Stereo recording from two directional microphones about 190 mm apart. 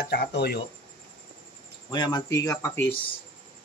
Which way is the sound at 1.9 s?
20° left (ahead or behind).